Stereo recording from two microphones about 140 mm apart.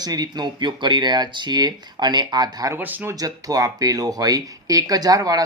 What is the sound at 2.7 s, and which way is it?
Speech, 15° right (ahead or behind).